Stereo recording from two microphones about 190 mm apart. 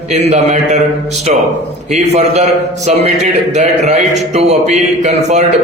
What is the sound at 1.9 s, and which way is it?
A man's voice, 35° right (ahead or behind).